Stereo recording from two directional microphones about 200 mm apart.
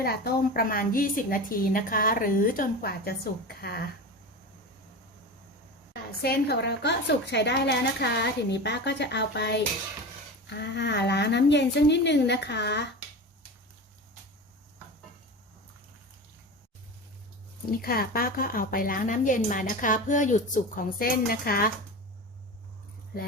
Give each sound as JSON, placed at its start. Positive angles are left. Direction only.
{"t": 0.0, "sound": "a woman's voice", "side_deg": 50}
{"t": 6.1, "sound": "a woman's voice", "side_deg": 50}
{"t": 17.7, "sound": "a woman's voice", "side_deg": 50}